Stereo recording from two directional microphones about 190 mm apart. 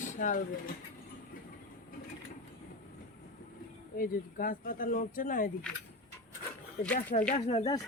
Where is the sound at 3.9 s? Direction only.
45° left (ahead or behind).